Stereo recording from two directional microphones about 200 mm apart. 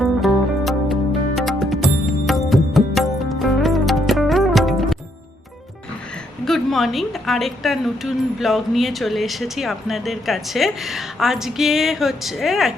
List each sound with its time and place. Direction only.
0.0 s music: centre (ahead or behind)
6.4 s a woman's voice: centre (ahead or behind)